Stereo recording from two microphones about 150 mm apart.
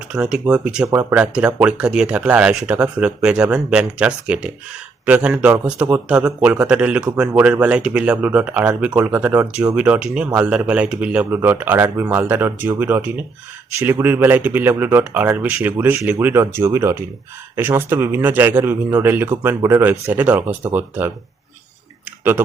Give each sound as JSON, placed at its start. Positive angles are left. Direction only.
{"t": 0.1, "sound": "a man's voice", "side_deg": -5}
{"t": 22.2, "sound": "speech", "side_deg": -15}